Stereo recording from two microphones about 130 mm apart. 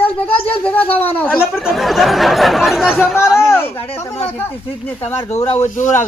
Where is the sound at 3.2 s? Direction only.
20° left (ahead or behind).